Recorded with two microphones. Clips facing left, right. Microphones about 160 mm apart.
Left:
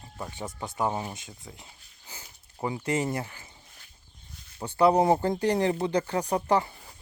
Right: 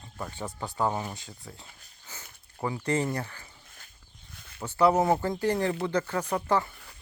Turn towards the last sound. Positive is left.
turn(degrees=20)  # may be behind; listen again after turning